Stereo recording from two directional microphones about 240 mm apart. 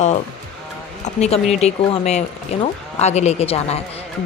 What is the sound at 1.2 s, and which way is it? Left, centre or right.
Speech, left.